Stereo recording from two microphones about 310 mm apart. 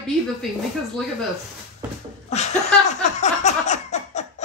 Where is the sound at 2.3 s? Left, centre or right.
Left.